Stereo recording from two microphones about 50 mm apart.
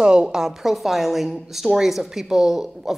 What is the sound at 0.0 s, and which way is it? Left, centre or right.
A woman's voice, centre.